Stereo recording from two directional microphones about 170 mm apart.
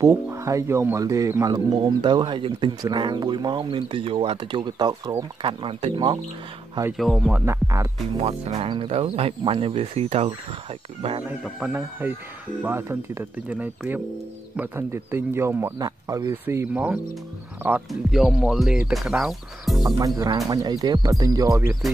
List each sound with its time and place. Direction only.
0.0 s speech: 15° right (ahead or behind)
7.0 s speech: centre (ahead or behind)
7.4 s speech: 20° right (ahead or behind)
8.2 s speech: 40° right (ahead or behind)
11.4 s speech: 10° right (ahead or behind)
20.2 s speech: 20° right (ahead or behind)